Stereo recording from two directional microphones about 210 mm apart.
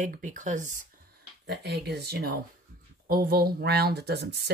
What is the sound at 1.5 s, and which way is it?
Speech, 50° right (ahead or behind).